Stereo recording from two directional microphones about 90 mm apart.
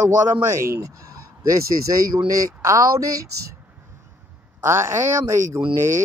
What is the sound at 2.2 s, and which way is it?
Speech, 40° right (ahead or behind).